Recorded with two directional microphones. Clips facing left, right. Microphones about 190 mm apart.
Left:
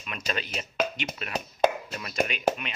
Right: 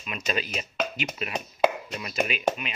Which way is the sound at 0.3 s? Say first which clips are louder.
Right 3 dB; 10° right (ahead or behind).